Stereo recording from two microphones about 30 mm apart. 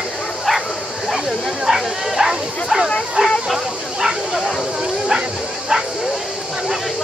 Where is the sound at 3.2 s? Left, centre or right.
Right.